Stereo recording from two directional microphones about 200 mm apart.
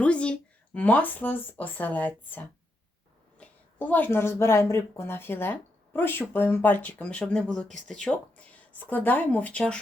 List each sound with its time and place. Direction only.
0.0 s speech: 5° left (ahead or behind)